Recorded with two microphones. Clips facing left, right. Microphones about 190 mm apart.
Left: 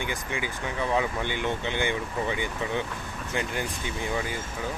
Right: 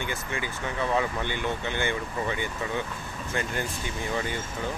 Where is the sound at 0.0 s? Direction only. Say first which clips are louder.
Left 1 dB; 15° left (ahead or behind).